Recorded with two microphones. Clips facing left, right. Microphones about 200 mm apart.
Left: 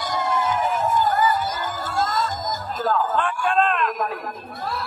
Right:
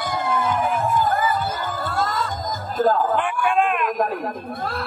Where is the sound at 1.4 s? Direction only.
60° right (ahead or behind).